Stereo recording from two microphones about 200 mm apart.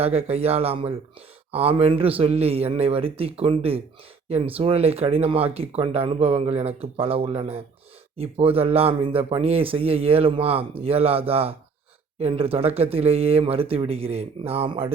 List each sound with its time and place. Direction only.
0.0 s a man's voice: 30° right (ahead or behind)